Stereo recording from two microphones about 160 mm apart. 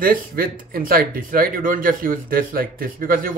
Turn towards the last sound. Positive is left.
turn(degrees=-60)  # may be behind; listen again after turning